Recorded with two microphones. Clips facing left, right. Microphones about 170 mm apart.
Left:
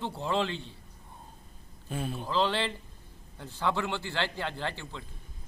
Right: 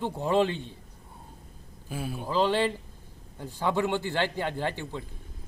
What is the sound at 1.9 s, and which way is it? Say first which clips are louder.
A man's voice: right 1 dB; 5° right (ahead or behind).